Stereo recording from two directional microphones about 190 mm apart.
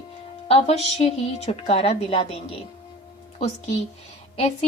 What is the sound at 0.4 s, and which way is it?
Speech, 35° left (ahead or behind).